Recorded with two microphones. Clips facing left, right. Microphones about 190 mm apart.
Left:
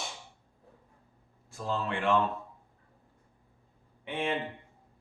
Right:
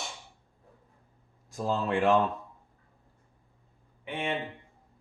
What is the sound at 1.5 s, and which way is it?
Speech, 40° right (ahead or behind).